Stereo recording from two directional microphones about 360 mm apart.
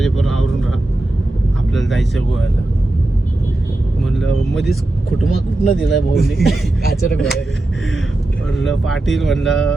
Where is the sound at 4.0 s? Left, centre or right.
Centre.